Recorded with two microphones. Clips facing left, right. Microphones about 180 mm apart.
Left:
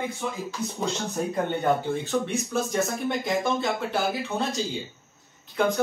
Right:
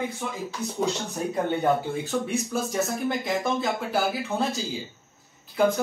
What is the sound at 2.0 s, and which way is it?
Speech, 10° right (ahead or behind).